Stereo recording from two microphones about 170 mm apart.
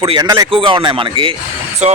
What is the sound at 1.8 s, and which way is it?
Speech, 40° right (ahead or behind).